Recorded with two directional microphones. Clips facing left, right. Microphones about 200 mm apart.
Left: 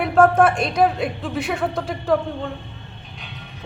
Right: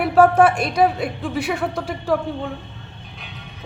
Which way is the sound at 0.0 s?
5° right (ahead or behind).